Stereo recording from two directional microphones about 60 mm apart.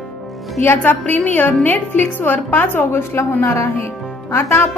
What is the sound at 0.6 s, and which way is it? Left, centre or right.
A woman's voice, left.